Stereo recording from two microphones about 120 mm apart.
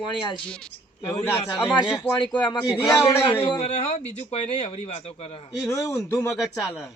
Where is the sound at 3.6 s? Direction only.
65° left (ahead or behind).